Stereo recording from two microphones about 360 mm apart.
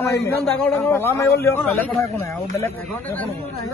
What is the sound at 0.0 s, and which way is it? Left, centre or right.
A man's voice, centre.